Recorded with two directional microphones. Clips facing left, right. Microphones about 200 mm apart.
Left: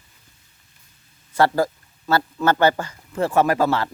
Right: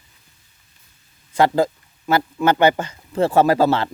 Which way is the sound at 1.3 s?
20° right (ahead or behind).